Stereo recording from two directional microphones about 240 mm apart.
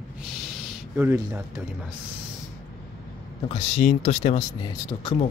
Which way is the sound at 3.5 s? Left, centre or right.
Left.